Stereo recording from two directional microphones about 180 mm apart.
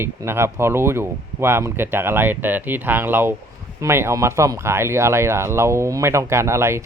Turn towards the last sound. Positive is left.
turn(degrees=-15)  # may be behind; listen again after turning